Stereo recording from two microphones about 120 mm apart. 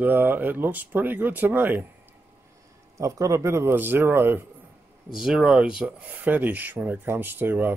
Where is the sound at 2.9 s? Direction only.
25° right (ahead or behind).